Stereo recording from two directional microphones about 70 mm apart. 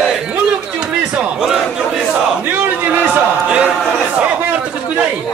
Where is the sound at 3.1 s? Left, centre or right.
Centre.